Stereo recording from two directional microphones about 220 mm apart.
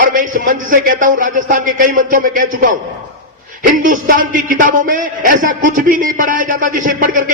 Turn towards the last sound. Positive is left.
turn(degrees=-35)  # may be behind; listen again after turning